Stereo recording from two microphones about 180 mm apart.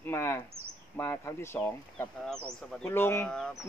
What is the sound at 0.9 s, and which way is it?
Speech, 10° left (ahead or behind).